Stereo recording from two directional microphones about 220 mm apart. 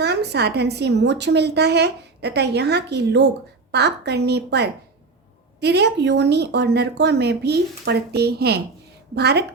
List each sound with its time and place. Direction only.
0.0 s a woman's voice: 50° right (ahead or behind)